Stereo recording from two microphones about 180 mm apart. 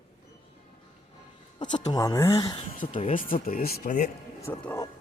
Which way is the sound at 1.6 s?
40° left (ahead or behind).